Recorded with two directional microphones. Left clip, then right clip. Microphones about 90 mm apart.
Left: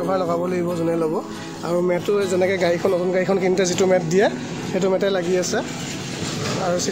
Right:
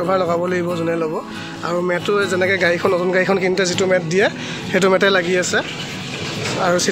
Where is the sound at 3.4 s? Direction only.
35° left (ahead or behind).